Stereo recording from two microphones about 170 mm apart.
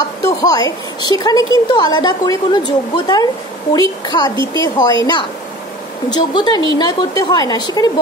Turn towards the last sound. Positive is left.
turn(degrees=20)  # may be behind; listen again after turning